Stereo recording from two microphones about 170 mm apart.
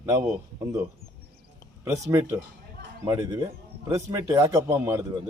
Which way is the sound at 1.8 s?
15° right (ahead or behind).